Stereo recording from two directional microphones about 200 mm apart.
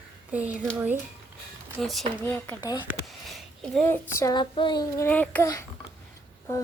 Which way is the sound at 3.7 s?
5° left (ahead or behind).